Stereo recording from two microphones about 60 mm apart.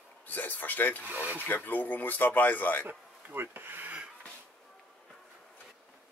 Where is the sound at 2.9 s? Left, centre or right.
Right.